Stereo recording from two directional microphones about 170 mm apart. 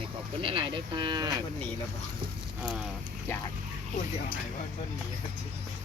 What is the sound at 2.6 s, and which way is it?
Speech, 5° right (ahead or behind).